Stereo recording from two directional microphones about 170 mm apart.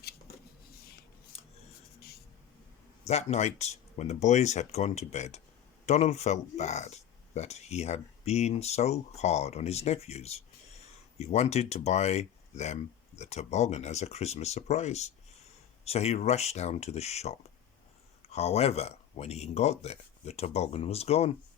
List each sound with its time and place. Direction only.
3.1 s speech: 40° left (ahead or behind)